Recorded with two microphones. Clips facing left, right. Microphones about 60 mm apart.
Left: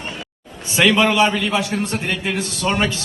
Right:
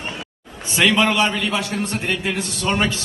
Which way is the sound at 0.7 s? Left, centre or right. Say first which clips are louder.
Left 2 dB; centre.